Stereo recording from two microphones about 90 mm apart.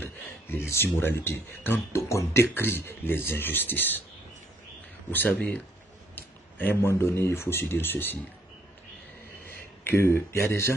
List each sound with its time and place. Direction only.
0.0 s speech: 25° left (ahead or behind)
5.1 s speech: 20° left (ahead or behind)
9.8 s speech: 30° left (ahead or behind)